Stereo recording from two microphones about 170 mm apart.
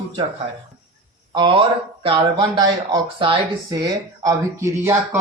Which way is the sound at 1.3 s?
30° right (ahead or behind).